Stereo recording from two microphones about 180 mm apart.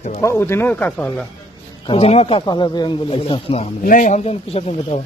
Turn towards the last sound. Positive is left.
turn(degrees=35)  # may be behind; listen again after turning